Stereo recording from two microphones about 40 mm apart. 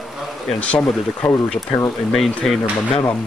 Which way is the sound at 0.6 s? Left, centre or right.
Left.